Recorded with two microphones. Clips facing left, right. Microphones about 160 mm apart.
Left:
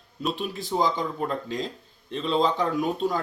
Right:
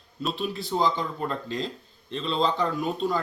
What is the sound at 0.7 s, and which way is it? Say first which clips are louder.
Speech: left 1 dB; 10° left (ahead or behind).